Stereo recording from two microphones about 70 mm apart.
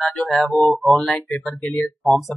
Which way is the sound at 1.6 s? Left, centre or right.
Centre.